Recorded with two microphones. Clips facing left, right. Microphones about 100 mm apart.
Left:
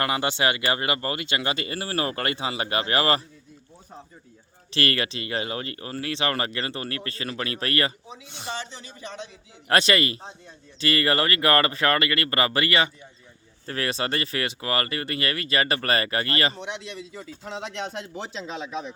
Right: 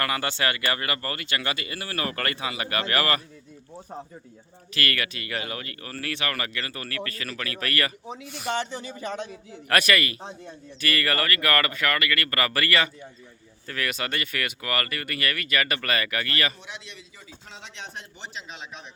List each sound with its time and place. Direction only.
0.0 s speech: 20° left (ahead or behind)
4.7 s speech: 30° left (ahead or behind)
8.5 s speech: 50° right (ahead or behind)
9.6 s speech: 25° left (ahead or behind)
16.6 s speech: 70° left (ahead or behind)